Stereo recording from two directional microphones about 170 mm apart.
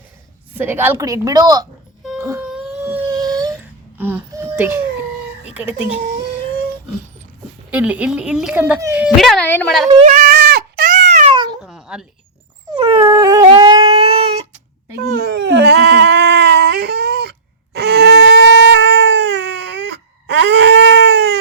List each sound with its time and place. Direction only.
0.5 s speech: 10° right (ahead or behind)
2.2 s whimper: 15° right (ahead or behind)
2.5 s a sound: 5° right (ahead or behind)
5.5 s speech: 10° right (ahead or behind)
7.7 s speech: 10° right (ahead or behind)
9.0 s speech: centre (ahead or behind)
10.1 s goat: 55° right (ahead or behind)
10.3 s goat: 80° right
10.8 s cat: 45° right (ahead or behind)
11.6 s a sound: 5° right (ahead or behind)
12.7 s dog: 20° right (ahead or behind)
13.5 s a sound: 30° right (ahead or behind)
15.0 s a sound: 65° right (ahead or behind); by 19.8 s 90° right
20.2 s baby cry: 90° right